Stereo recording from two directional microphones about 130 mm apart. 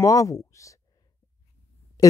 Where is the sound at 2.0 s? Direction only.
30° left (ahead or behind).